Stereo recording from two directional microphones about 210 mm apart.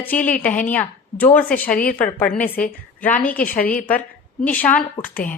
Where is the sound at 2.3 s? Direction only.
40° left (ahead or behind).